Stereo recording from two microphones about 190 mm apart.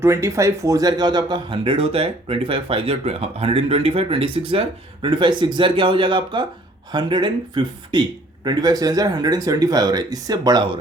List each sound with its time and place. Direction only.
0.0 s speech: 15° right (ahead or behind)